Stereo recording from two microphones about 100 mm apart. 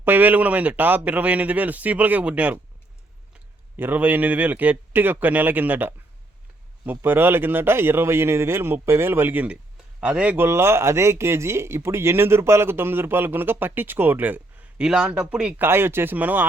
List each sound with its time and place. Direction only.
0.0 s speech: 20° right (ahead or behind)
3.8 s speech: 20° right (ahead or behind)
10.3 s speech: 25° right (ahead or behind)
15.6 s speech: 25° right (ahead or behind)